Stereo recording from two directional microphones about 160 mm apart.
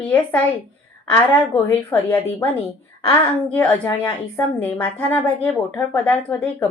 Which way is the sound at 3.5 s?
10° left (ahead or behind).